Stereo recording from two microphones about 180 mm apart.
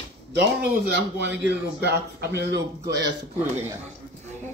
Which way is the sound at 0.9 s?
75° right (ahead or behind).